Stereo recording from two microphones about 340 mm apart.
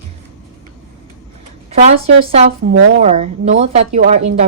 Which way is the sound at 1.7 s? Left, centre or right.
Centre.